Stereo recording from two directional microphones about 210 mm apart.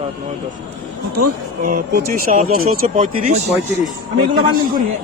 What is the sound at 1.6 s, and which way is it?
Speech, 40° right (ahead or behind).